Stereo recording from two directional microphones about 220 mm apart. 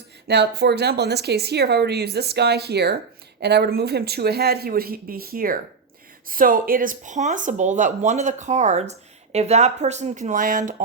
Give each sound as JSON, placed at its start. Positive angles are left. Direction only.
{"t": 0.3, "sound": "a woman's voice", "side_deg": -50}